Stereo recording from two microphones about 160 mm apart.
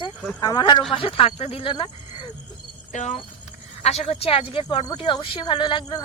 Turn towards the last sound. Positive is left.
turn(degrees=30)  # may be behind; listen again after turning